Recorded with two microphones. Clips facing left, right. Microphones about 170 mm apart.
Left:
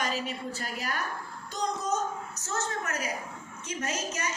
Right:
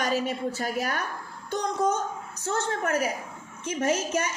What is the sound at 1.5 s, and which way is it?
A woman's voice, 55° right (ahead or behind).